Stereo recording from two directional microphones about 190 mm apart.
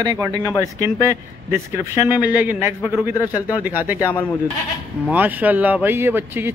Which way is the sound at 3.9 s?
15° left (ahead or behind).